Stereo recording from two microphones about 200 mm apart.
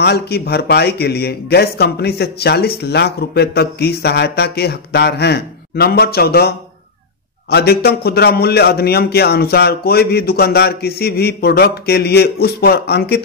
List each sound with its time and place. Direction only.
0.0 s a man's voice: 55° left (ahead or behind)